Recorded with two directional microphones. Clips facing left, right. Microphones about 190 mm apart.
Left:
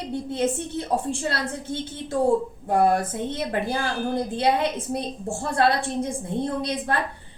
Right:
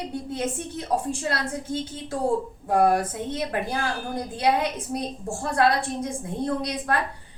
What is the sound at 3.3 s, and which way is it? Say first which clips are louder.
A woman's voice: left 1 dB; 25° left (ahead or behind).